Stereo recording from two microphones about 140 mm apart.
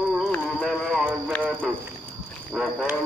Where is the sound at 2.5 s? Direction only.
5° right (ahead or behind).